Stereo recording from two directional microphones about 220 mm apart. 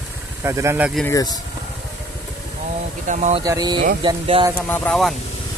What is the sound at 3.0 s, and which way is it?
Speech, 30° right (ahead or behind).